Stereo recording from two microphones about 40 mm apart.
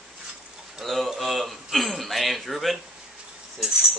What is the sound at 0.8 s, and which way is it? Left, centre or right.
A man's voice, centre.